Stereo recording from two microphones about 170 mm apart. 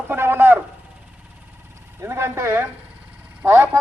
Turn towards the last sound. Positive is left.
turn(degrees=-15)  # may be behind; listen again after turning